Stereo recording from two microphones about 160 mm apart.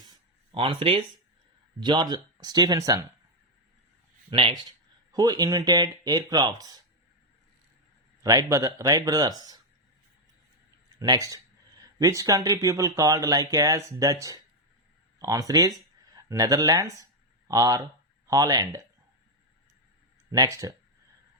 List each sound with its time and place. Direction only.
0.5 s speech: 35° right (ahead or behind)
4.3 s speech: 30° right (ahead or behind)
8.2 s speech: 20° right (ahead or behind)
11.0 s speech: 25° right (ahead or behind)
20.3 s speech: 20° right (ahead or behind)